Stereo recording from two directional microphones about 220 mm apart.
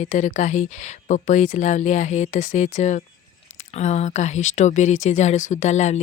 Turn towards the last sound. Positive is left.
turn(degrees=30)  # may be behind; listen again after turning